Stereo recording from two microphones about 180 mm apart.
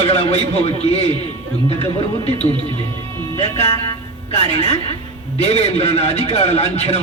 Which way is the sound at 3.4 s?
35° left (ahead or behind).